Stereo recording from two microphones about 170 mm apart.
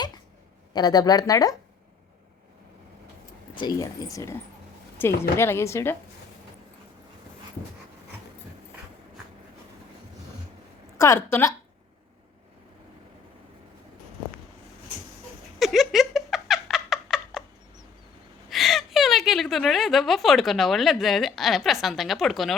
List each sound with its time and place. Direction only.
0.7 s speech: 25° left (ahead or behind)
3.5 s speech: 25° left (ahead or behind)
10.9 s speech: 15° left (ahead or behind)
15.5 s a sound: centre (ahead or behind)
18.4 s a woman's voice: centre (ahead or behind)